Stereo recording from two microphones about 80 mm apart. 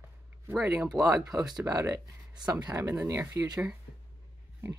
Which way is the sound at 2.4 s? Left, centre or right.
Right.